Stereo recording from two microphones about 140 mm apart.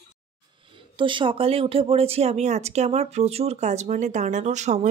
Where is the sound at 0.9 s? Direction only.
35° right (ahead or behind).